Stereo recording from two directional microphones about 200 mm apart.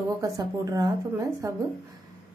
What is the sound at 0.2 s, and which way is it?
A woman's voice, 15° right (ahead or behind).